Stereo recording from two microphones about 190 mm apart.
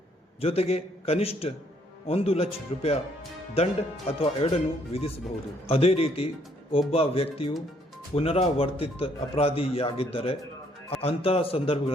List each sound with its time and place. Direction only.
0.4 s speech: 30° left (ahead or behind)